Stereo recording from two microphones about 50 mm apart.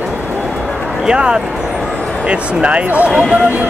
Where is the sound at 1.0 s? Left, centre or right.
Centre.